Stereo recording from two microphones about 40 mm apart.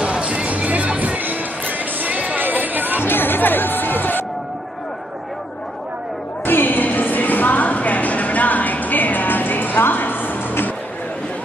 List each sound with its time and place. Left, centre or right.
0.0 s music: right
3.0 s music: left
6.4 s a sound: left